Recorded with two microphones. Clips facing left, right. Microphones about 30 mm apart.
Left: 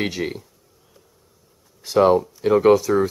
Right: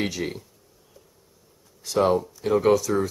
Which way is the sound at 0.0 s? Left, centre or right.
Centre.